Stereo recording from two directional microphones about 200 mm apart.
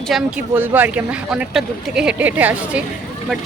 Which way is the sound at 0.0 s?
Centre (ahead or behind).